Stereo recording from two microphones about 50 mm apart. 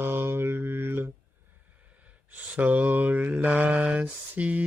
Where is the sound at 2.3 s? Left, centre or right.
Right.